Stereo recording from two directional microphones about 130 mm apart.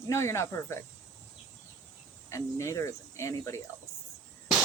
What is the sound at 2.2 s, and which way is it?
Speech, 25° left (ahead or behind).